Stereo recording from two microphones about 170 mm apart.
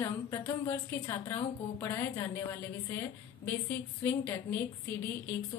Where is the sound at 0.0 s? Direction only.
15° left (ahead or behind).